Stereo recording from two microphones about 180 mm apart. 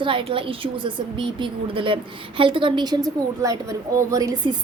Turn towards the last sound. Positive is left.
turn(degrees=-20)  # may be behind; listen again after turning